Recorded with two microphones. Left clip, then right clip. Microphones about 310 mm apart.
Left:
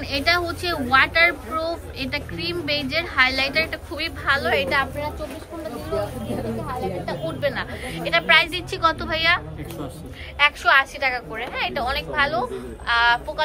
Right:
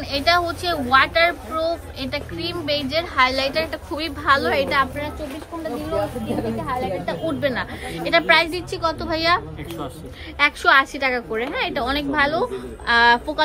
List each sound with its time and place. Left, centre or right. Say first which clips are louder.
0.1 s a woman's voice: right 2 dB; centre
7.4 s a woman's voice: right 1 dB; centre
10.4 s a woman's voice: right 1 dB; right